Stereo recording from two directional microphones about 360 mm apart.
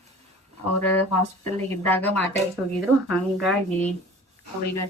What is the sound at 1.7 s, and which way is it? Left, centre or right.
A woman's voice, centre.